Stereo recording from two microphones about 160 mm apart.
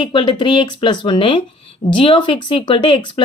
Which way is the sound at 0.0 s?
30° left (ahead or behind).